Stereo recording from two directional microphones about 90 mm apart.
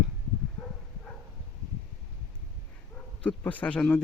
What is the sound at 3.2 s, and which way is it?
Speech, 15° left (ahead or behind).